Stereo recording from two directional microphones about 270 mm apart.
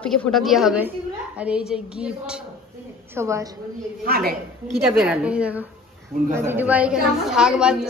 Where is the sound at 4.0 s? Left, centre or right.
Right.